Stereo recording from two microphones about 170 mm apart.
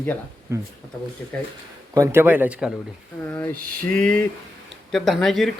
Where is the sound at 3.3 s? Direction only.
10° left (ahead or behind).